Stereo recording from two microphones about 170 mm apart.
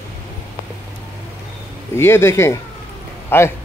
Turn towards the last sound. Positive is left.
turn(degrees=15)  # may be behind; listen again after turning